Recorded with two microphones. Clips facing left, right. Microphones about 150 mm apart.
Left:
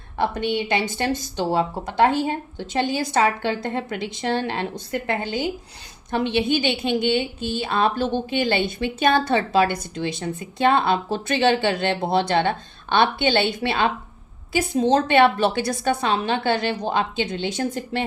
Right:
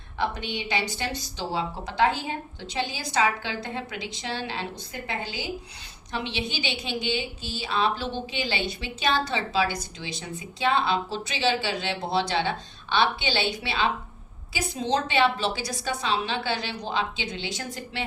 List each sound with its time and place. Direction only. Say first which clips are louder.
0.2 s a woman's voice: left 7 dB; 50° left (ahead or behind)